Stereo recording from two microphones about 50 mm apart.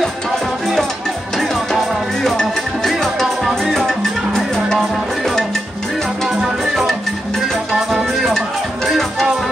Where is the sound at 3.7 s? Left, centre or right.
Centre.